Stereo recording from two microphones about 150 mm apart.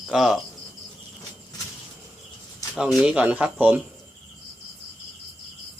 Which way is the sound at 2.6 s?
20° left (ahead or behind).